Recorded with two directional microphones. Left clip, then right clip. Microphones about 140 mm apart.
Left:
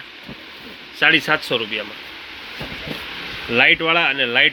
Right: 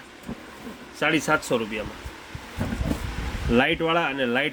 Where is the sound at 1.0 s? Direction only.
15° right (ahead or behind).